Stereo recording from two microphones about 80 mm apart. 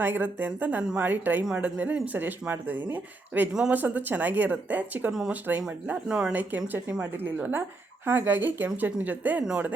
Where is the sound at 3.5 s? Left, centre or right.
Centre.